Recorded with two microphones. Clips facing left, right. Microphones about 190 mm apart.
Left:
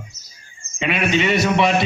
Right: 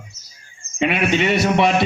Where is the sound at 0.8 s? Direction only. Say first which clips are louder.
Right 1 dB; 55° right (ahead or behind).